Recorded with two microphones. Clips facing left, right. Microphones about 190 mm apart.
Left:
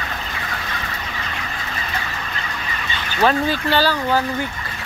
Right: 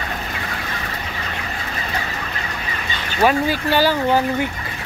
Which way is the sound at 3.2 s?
10° right (ahead or behind).